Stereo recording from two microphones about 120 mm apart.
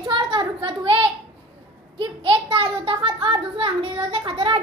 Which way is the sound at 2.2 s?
45° right (ahead or behind).